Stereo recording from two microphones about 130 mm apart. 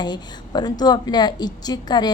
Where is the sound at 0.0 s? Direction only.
35° left (ahead or behind).